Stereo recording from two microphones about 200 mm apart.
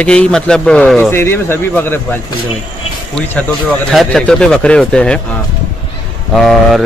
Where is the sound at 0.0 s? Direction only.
5° left (ahead or behind).